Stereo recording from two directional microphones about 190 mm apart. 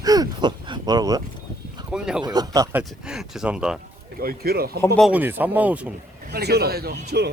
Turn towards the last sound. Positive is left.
turn(degrees=-60)  # may be behind; listen again after turning